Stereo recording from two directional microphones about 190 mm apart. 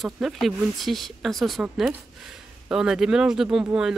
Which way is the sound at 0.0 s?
Centre (ahead or behind).